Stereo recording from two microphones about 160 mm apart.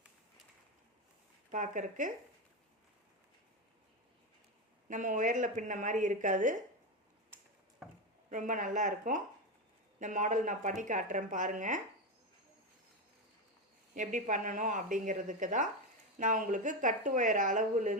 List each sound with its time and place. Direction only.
1.5 s speech: 55° right (ahead or behind)
4.9 s speech: 55° right (ahead or behind)
8.3 s speech: 55° right (ahead or behind)
13.9 s speech: 55° right (ahead or behind)